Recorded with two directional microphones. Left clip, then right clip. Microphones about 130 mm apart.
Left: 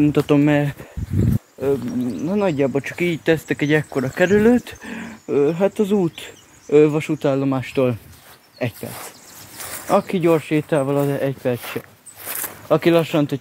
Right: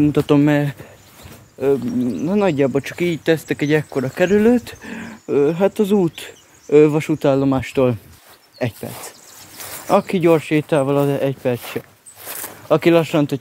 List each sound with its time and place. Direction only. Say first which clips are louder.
0.3 s speech: right 1 dB; 20° right (ahead or behind)
1.6 s speech: right 4 dB; 40° right (ahead or behind); by 5.1 s 5° right (ahead or behind)
5.3 s speech: right 2 dB; 20° right (ahead or behind)
7.0 s speech: right 3 dB; 50° right (ahead or behind)
7.7 s speech: right 2 dB; 40° right (ahead or behind)
9.6 s a sound: left 1 dB; centre (ahead or behind)
9.8 s speech: right 2 dB; 20° right (ahead or behind)
12.3 s a sound: right 1 dB; 15° right (ahead or behind)